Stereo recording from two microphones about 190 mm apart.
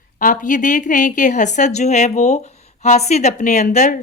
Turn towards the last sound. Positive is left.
turn(degrees=40)  # may be behind; listen again after turning